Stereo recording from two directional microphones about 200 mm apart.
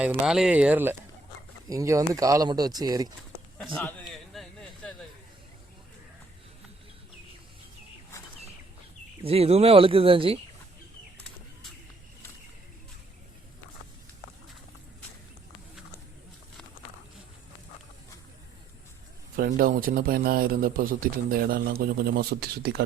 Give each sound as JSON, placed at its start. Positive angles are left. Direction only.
{"t": 0.0, "sound": "speech", "side_deg": -5}
{"t": 3.6, "sound": "a sound", "side_deg": 5}
{"t": 9.2, "sound": "speech", "side_deg": -30}
{"t": 19.4, "sound": "a man's voice", "side_deg": -45}